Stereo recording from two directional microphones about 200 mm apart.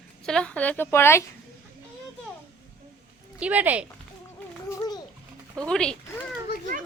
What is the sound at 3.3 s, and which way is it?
Speech, 5° right (ahead or behind).